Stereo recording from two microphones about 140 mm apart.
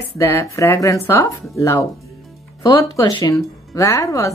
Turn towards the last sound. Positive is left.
turn(degrees=25)  # may be behind; listen again after turning